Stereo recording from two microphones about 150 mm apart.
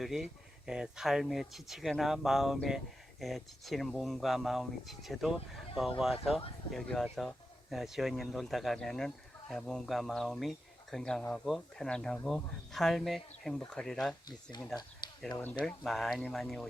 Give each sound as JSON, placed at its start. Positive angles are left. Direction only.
{"t": 0.0, "sound": "speech", "side_deg": 0}
{"t": 15.2, "sound": "speech", "side_deg": 5}